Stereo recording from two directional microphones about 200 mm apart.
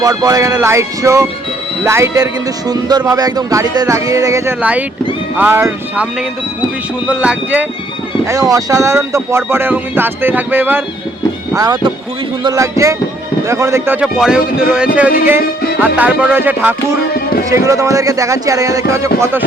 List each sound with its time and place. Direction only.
0.0 s speech: 20° right (ahead or behind)
14.7 s a sound: 5° right (ahead or behind)
15.8 s speech: 5° right (ahead or behind)